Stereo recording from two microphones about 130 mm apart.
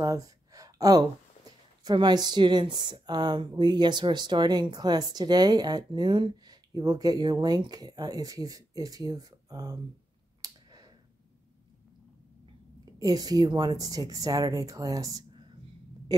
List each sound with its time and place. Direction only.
0.0 s a sound: 25° right (ahead or behind)
1.9 s a woman's voice: 35° right (ahead or behind)
10.4 s clicking: 30° right (ahead or behind)
13.0 s speech: 30° right (ahead or behind)